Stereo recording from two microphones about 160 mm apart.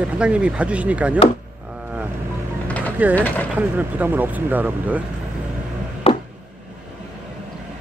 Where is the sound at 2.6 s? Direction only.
10° left (ahead or behind).